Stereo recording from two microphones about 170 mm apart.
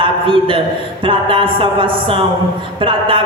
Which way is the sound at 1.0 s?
30° right (ahead or behind).